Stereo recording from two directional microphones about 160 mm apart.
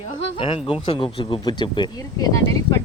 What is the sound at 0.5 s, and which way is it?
Speech, 35° left (ahead or behind).